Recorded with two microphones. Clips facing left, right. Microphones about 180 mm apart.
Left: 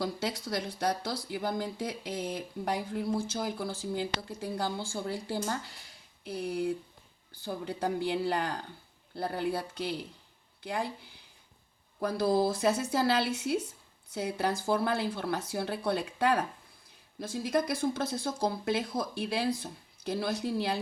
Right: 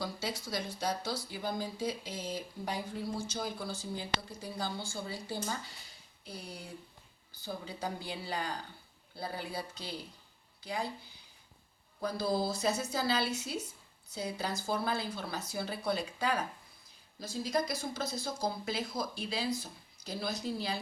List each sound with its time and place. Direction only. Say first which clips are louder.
0.0 s speech: left 5 dB; 60° left (ahead or behind)